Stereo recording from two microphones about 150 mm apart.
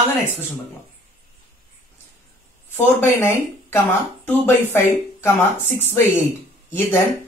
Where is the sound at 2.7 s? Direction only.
15° left (ahead or behind).